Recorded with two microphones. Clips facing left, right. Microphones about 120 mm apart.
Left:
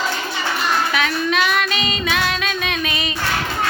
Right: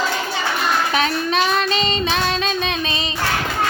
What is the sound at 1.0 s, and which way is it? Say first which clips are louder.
Child singing: right 1 dB; 35° right (ahead or behind).